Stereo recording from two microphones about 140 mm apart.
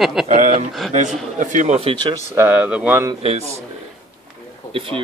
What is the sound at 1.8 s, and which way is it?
Speech, 40° right (ahead or behind).